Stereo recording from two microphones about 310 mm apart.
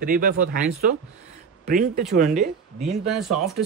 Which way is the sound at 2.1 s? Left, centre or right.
Right.